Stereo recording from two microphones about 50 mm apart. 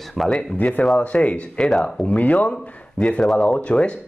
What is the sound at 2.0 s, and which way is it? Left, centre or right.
Speech, left.